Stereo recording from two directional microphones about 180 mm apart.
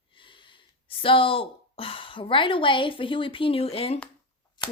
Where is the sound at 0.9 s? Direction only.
30° left (ahead or behind).